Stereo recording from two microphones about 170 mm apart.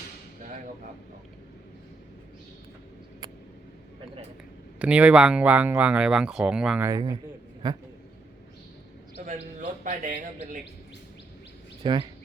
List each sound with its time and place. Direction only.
4.8 s speech: 5° right (ahead or behind)
6.8 s speech: 20° right (ahead or behind)
9.2 s speech: 50° right (ahead or behind)
11.8 s speech: 30° right (ahead or behind)